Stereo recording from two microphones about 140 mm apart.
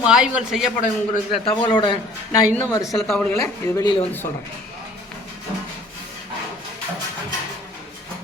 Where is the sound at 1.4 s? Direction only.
30° left (ahead or behind).